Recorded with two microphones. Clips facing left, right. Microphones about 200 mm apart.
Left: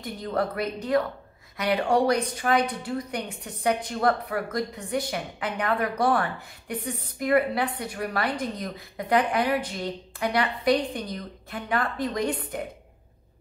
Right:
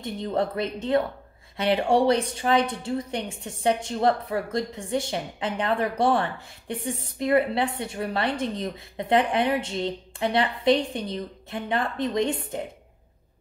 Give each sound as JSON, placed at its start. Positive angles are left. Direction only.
{"t": 0.0, "sound": "a woman's voice", "side_deg": -25}